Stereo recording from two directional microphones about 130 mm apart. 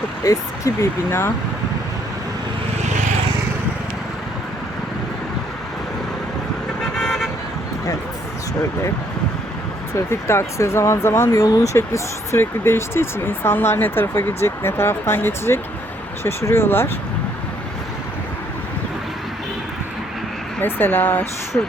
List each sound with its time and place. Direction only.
0.3 s speech: 25° left (ahead or behind)
6.9 s vehicle: 5° left (ahead or behind)
9.9 s speech: 20° left (ahead or behind)
20.6 s speech: 15° left (ahead or behind)